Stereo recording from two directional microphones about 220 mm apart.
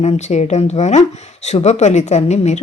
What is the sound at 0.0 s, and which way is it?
A woman's voice, 30° left (ahead or behind).